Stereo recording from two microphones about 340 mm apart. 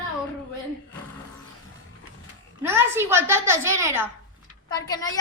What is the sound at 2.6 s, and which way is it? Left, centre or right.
A woman's voice, centre.